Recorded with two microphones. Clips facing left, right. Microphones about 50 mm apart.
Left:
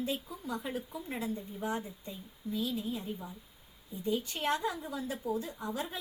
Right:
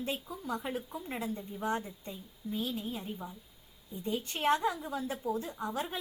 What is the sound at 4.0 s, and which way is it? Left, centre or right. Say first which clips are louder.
Speech: even; right.